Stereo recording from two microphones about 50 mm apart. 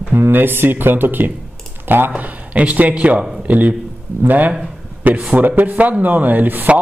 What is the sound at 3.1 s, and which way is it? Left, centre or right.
Speech, centre.